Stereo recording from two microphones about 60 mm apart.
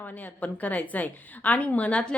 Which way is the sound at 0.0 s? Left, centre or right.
Left.